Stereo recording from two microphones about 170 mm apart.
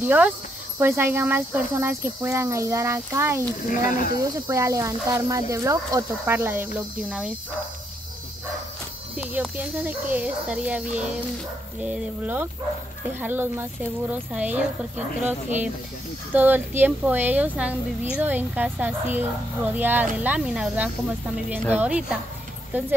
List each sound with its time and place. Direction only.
0.0 s speech: 10° right (ahead or behind)
3.6 s speech: 55° left (ahead or behind)
4.1 s speech: 15° right (ahead or behind)
9.1 s speech: 5° right (ahead or behind)